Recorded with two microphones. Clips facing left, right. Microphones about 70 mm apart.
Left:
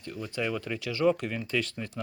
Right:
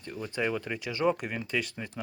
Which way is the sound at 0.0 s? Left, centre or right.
Right.